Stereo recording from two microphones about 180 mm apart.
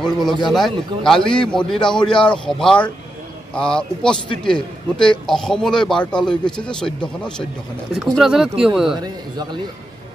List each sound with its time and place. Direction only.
0.0 s a man's voice: centre (ahead or behind)
9.0 s a man's voice: 25° right (ahead or behind)